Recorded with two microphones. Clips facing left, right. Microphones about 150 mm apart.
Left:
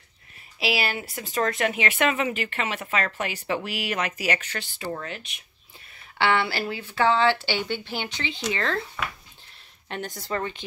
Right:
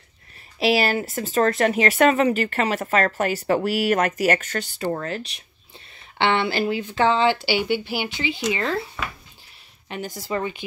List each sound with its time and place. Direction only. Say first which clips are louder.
0.6 s speech: right 7 dB; 40° right (ahead or behind)
6.1 s speech: right 3 dB; 20° right (ahead or behind)
9.8 s speech: right 2 dB; 5° right (ahead or behind)